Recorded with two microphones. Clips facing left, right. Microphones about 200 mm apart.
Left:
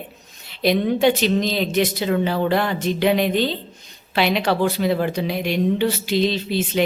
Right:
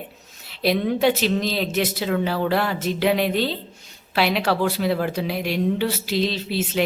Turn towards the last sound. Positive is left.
turn(degrees=-5)  # may be behind; listen again after turning